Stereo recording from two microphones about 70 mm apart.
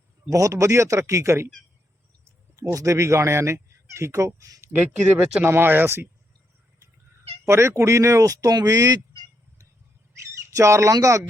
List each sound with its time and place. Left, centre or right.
0.3 s speech: right
2.7 s speech: right
4.6 s speech: right
7.4 s speech: right
10.5 s speech: right